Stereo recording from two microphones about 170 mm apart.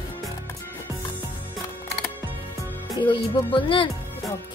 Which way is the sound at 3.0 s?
30° left (ahead or behind).